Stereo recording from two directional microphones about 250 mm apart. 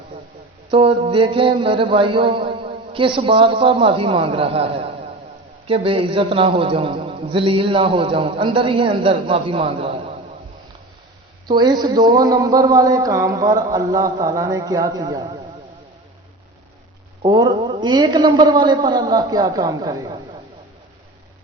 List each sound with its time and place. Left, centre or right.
0.7 s a man's voice: right
11.4 s speech: centre
17.2 s speech: centre